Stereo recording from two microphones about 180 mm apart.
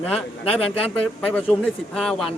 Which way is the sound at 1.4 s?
Centre (ahead or behind).